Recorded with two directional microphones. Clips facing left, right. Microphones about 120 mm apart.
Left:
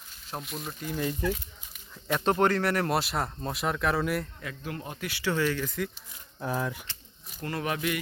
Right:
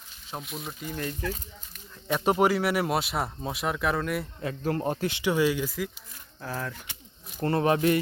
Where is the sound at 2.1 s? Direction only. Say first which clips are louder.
Right 1 dB; 10° right (ahead or behind).